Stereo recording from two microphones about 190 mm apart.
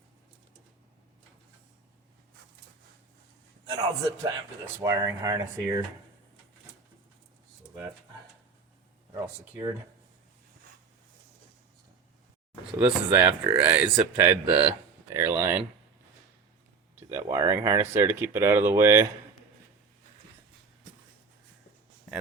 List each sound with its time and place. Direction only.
4.2 s speech: 15° right (ahead or behind)
9.1 s speech: 15° right (ahead or behind)
12.8 s speech: 10° right (ahead or behind)
16.9 s speech: 10° right (ahead or behind)